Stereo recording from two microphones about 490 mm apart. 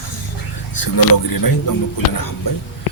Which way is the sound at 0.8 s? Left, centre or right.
Left.